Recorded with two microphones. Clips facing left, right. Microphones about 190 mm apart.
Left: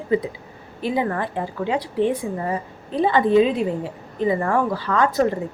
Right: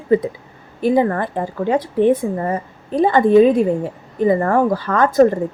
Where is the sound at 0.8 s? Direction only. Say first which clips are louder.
Right 7 dB; 45° right (ahead or behind).